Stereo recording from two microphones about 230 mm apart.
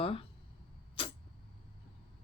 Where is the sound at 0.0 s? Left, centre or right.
Left.